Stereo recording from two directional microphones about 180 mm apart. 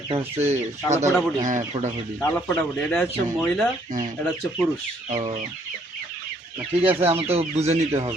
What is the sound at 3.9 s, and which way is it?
Speech, 45° right (ahead or behind).